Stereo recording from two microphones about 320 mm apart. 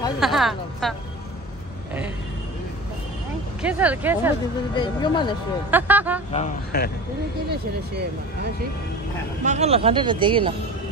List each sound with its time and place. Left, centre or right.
0.2 s a woman's voice: centre
3.6 s a woman's voice: centre
4.7 s speech: centre
5.7 s a woman's voice: centre
6.3 s speech: left
9.4 s speech: right